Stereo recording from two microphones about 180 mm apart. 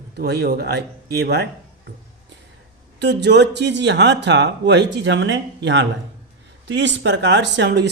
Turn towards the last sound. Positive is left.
turn(degrees=-75)  # may be behind; listen again after turning